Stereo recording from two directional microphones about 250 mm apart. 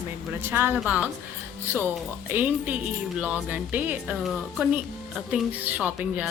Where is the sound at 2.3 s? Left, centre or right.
Centre.